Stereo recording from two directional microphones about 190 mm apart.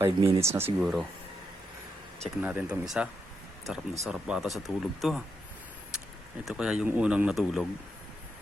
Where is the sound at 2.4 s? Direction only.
5° right (ahead or behind).